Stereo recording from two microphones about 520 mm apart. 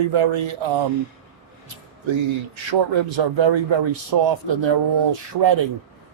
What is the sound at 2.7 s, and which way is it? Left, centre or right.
Speech, right.